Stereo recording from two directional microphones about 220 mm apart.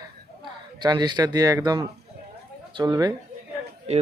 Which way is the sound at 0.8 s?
20° right (ahead or behind).